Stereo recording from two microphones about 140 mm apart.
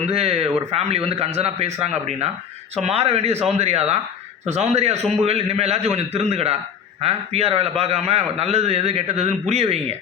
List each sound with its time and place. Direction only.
0.0 s speech: 45° right (ahead or behind)